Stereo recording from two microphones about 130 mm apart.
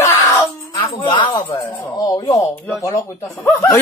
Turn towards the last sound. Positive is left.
turn(degrees=20)  # may be behind; listen again after turning